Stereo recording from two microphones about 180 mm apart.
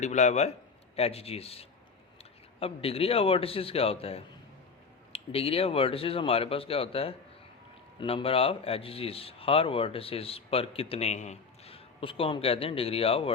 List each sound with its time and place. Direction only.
0.0 s a man's voice: 40° left (ahead or behind)